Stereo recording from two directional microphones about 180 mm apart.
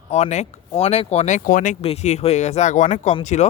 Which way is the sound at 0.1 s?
40° left (ahead or behind).